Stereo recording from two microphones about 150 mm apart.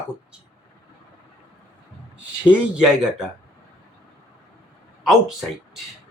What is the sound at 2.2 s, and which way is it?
Speech, 5° right (ahead or behind).